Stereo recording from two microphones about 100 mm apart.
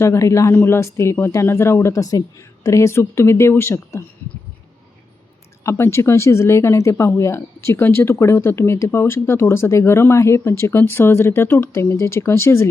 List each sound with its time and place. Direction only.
0.0 s speech: 30° left (ahead or behind)
5.6 s speech: 25° left (ahead or behind)